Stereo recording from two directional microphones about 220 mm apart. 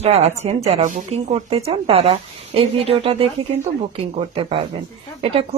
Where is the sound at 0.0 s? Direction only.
30° right (ahead or behind).